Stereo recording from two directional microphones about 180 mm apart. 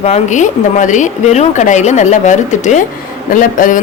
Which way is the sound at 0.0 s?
40° left (ahead or behind).